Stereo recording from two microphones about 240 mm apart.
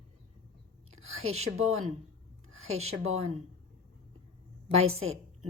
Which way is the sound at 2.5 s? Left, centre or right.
Right.